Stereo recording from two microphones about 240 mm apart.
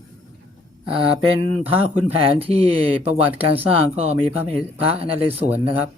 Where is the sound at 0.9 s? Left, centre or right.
Right.